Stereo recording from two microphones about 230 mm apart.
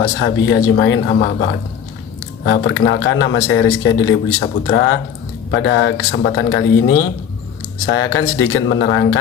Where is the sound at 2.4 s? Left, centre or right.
Left.